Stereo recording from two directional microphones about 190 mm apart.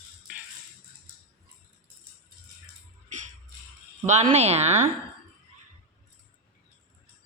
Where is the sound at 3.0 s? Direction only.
40° right (ahead or behind).